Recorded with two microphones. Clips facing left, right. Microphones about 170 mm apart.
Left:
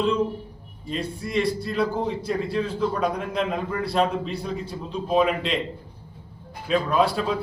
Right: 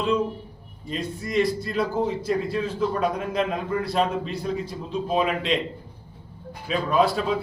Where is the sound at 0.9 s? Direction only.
Centre (ahead or behind).